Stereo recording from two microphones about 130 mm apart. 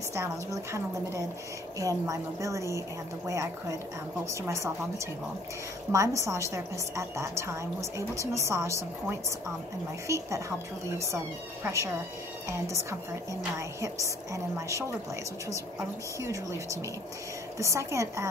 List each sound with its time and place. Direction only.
0.1 s a woman's voice: 20° right (ahead or behind)
4.3 s a woman's voice: 25° right (ahead or behind)
10.0 s a woman's voice: 25° right (ahead or behind)
11.6 s a woman's voice: 25° right (ahead or behind)
13.6 s a woman's voice: 25° right (ahead or behind)
16.2 s a woman's voice: 25° right (ahead or behind)